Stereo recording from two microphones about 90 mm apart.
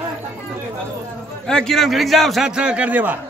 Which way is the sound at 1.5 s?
5° left (ahead or behind).